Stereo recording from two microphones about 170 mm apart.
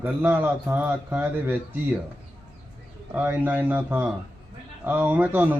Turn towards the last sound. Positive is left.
turn(degrees=-10)  # may be behind; listen again after turning